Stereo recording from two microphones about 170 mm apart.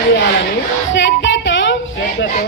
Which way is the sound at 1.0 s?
90° left.